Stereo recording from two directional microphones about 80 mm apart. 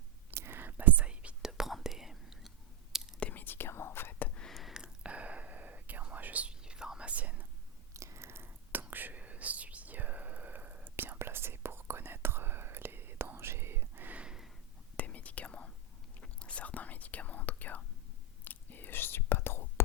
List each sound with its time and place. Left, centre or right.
0.3 s whispering: right; by 2.5 s centre
3.2 s whispering: centre
4.4 s whispering: centre
7.9 s whispering: right; by 14.5 s centre
14.9 s whispering: centre